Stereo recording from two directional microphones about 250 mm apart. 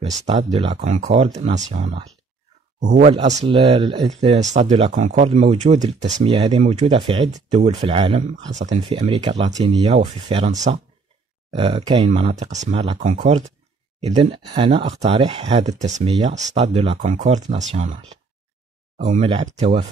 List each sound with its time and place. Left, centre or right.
0.3 s speech: right
18.9 s speech: right